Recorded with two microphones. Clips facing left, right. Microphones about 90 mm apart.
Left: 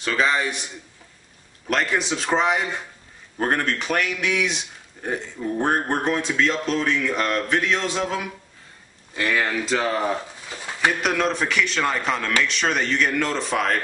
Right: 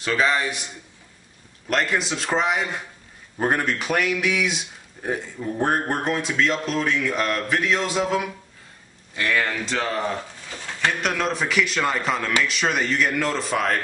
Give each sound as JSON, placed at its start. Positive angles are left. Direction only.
{"t": 0.0, "sound": "speech", "side_deg": 0}
{"t": 1.7, "sound": "speech", "side_deg": 0}